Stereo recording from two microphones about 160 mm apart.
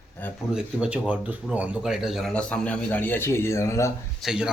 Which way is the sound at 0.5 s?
5° right (ahead or behind).